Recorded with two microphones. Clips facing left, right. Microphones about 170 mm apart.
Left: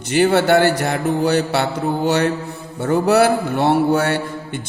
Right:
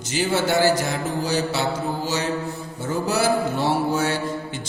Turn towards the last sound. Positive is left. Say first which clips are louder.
# left 6 dB
turn(degrees=60)  # may be behind; listen again after turning